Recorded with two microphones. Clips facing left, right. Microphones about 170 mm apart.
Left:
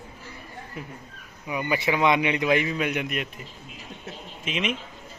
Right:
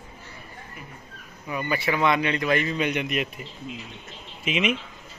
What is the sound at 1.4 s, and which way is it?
Speech, 15° left (ahead or behind).